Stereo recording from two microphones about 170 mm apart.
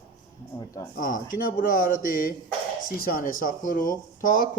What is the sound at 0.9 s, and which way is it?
Speech, 50° left (ahead or behind).